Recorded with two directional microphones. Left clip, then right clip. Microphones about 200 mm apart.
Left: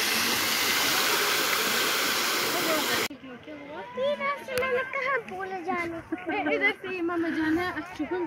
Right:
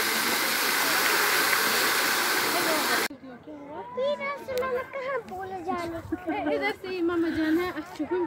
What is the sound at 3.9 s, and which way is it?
A child's voice, 20° left (ahead or behind).